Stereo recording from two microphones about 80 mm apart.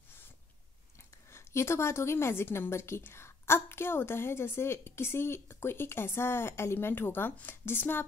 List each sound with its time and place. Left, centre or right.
1.3 s a woman's voice: left